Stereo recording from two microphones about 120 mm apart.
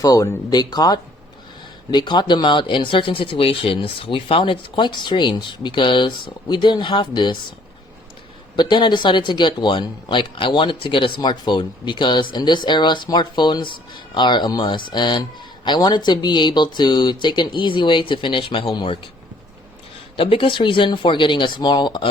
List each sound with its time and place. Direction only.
0.0 s speech: 30° left (ahead or behind)
8.5 s speech: 40° left (ahead or behind)
20.1 s speech: 45° left (ahead or behind)